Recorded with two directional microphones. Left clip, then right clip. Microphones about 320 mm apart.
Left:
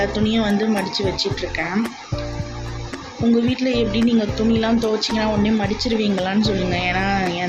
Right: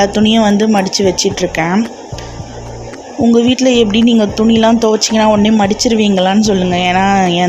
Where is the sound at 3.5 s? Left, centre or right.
Right.